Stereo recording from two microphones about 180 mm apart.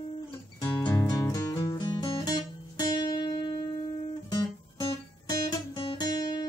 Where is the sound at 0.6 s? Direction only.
25° left (ahead or behind).